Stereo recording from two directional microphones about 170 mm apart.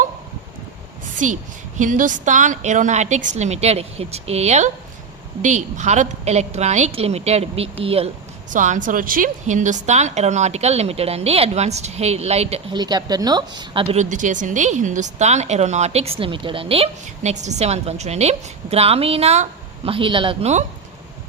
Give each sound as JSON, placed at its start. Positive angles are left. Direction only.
{"t": 1.8, "sound": "a woman's voice", "side_deg": -50}
{"t": 8.4, "sound": "a woman's voice", "side_deg": -50}
{"t": 12.7, "sound": "speech", "side_deg": -25}
{"t": 13.8, "sound": "a woman's voice", "side_deg": -40}